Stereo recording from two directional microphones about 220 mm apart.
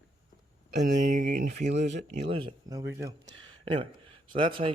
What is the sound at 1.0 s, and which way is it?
Speech, 35° right (ahead or behind).